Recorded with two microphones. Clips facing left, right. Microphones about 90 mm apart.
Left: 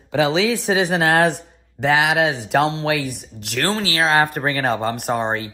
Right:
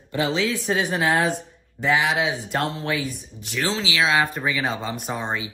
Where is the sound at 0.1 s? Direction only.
85° left; by 4.3 s 45° left (ahead or behind).